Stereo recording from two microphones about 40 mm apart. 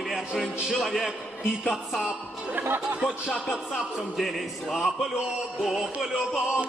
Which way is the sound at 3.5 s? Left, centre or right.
Centre.